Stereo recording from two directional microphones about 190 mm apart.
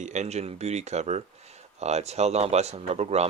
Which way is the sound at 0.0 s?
35° right (ahead or behind).